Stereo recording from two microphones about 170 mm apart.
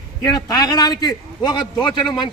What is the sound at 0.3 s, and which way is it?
A man's voice, 25° left (ahead or behind).